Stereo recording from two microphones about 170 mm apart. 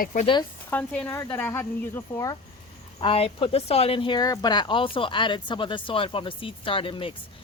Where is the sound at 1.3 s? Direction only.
15° left (ahead or behind).